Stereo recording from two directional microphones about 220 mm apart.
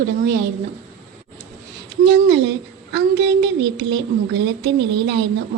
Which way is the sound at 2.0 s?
55° right (ahead or behind).